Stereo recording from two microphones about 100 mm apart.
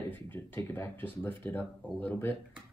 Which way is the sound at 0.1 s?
20° left (ahead or behind).